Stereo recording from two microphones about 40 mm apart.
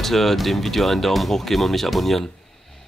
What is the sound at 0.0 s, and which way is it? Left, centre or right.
Speech, centre.